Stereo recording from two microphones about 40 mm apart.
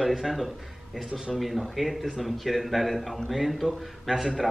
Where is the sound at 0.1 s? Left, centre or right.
Centre.